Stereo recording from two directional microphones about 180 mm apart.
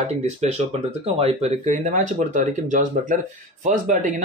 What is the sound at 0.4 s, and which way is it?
Speech, 40° right (ahead or behind).